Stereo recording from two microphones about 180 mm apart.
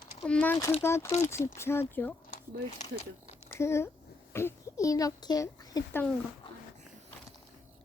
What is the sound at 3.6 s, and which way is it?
A child's voice, 15° left (ahead or behind).